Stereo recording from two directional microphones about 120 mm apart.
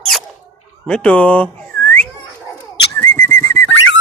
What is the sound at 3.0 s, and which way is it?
Whistling, 20° left (ahead or behind).